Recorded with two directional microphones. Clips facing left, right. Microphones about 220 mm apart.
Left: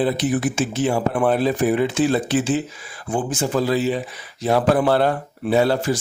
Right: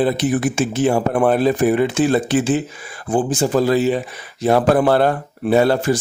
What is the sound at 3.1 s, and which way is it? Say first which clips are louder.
A man's voice: right 5 dB; 35° right (ahead or behind).